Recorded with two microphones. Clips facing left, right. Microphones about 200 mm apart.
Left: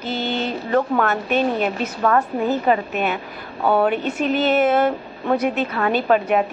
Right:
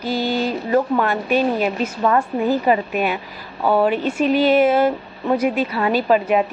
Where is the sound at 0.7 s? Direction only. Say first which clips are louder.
Even; 10° right (ahead or behind).